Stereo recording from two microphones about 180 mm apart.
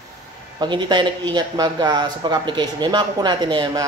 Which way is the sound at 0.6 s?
25° right (ahead or behind).